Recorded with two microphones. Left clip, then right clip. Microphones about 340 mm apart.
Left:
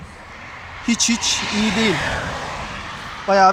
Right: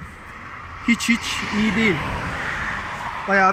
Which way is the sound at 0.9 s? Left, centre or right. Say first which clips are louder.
Left 1 dB; left.